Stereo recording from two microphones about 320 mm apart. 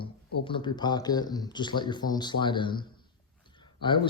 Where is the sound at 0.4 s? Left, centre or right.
Centre.